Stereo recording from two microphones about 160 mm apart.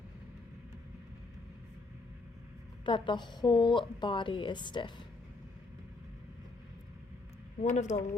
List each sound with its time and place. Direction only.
2.8 s speech: 30° left (ahead or behind)
7.6 s speech: 45° left (ahead or behind)